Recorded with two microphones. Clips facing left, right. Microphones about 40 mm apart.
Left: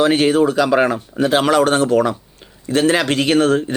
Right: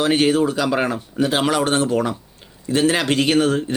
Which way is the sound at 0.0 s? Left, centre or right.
Left.